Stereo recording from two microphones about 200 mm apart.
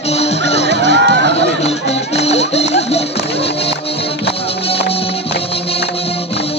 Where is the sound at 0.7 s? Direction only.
60° right (ahead or behind).